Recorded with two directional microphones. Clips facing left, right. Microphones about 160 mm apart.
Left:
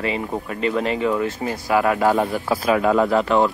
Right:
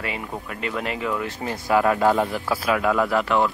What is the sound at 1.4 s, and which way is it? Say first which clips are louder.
Speech: right 2 dB; 15° left (ahead or behind).